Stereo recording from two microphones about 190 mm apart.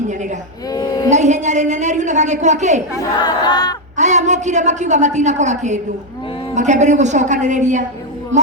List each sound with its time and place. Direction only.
0.7 s a sound: 20° left (ahead or behind)
1.1 s a woman's voice: 40° right (ahead or behind)
3.2 s battle cry: 20° left (ahead or behind)
3.9 s a woman's voice: 40° right (ahead or behind)